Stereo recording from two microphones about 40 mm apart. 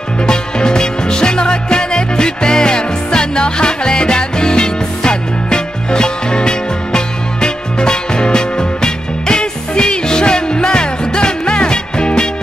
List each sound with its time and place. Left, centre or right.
0.2 s music: left